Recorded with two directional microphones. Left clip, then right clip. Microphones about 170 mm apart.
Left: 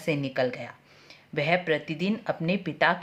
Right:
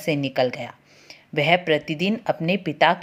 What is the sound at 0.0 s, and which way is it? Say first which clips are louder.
Speech: right 5 dB; 20° right (ahead or behind).